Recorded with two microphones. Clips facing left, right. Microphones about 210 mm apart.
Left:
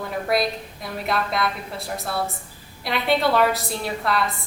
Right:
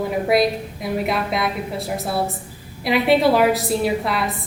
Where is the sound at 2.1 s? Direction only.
25° right (ahead or behind).